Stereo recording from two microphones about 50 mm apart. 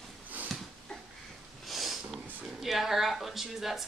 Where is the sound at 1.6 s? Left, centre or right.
Centre.